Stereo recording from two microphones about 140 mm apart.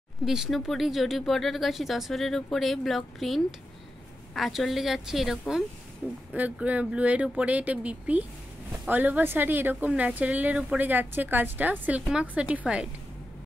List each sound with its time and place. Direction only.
0.2 s a woman's voice: centre (ahead or behind)